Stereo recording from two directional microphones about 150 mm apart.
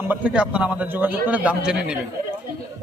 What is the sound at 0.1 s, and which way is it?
A man's voice, 10° right (ahead or behind).